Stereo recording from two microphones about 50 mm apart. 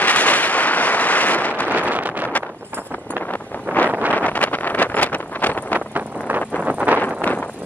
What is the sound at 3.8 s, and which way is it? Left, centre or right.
Wind noise, left.